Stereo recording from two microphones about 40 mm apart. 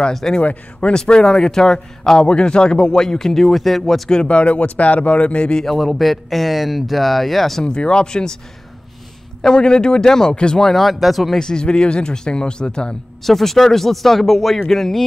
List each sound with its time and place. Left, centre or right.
0.4 s speech: left
0.9 s speech: centre
3.5 s speech: centre
4.1 s speech: left
5.7 s speech: centre
7.6 s speech: left
9.4 s speech: centre
11.3 s speech: centre
13.2 s speech: centre